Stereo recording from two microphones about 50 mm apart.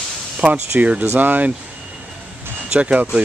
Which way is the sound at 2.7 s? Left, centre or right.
Right.